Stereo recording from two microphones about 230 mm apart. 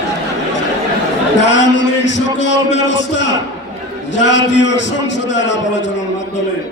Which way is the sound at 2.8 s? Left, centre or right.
Left.